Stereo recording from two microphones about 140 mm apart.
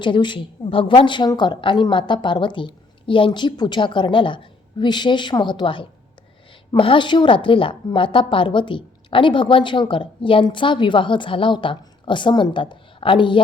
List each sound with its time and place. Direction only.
0.0 s a woman's voice: 35° left (ahead or behind)